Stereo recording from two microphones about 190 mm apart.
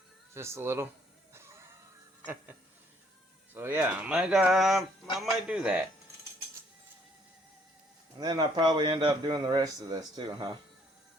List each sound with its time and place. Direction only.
0.3 s speech: 15° right (ahead or behind)
1.3 s music: 15° right (ahead or behind)
2.2 s speech: 10° right (ahead or behind)
8.2 s a man's voice: 20° right (ahead or behind)